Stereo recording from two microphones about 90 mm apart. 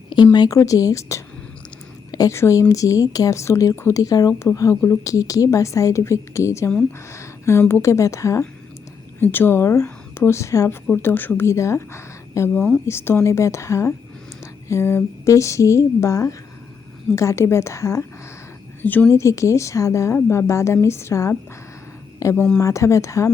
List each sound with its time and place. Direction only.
0.3 s a woman's voice: 45° left (ahead or behind)
2.3 s a woman's voice: 35° left (ahead or behind)
9.1 s speech: 20° left (ahead or behind)
10.9 s speech: 20° left (ahead or behind)
11.4 s a woman's voice: 30° left (ahead or behind)
18.8 s a woman's voice: 20° left (ahead or behind)
19.1 s a woman's voice: 35° left (ahead or behind)